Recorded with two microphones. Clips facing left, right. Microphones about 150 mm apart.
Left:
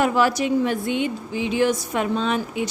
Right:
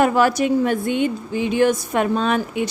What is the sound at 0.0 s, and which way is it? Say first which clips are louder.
A woman's voice: right 3 dB; 50° right (ahead or behind).